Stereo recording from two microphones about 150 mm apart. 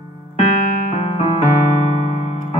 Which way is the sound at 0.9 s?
45° left (ahead or behind).